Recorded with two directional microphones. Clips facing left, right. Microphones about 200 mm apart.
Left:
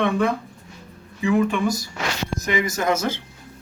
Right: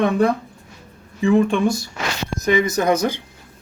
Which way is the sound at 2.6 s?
20° right (ahead or behind).